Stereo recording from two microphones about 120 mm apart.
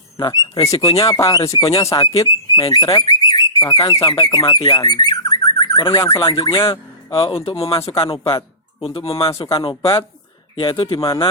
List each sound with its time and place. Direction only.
0.2 s speech: 35° left (ahead or behind)
2.2 s speech: 40° left (ahead or behind)
4.1 s bird: 35° left (ahead or behind)
6.5 s speech: 45° left (ahead or behind)
8.2 s speech: 25° left (ahead or behind)
8.8 s speech: 50° left (ahead or behind)